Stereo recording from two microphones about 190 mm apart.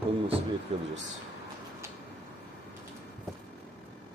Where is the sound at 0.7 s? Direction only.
35° right (ahead or behind).